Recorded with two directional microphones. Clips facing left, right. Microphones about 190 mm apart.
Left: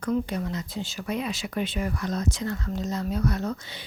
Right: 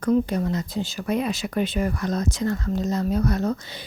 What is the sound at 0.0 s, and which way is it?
Speech, 40° right (ahead or behind).